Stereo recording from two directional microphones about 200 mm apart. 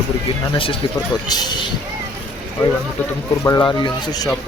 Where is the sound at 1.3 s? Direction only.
20° left (ahead or behind).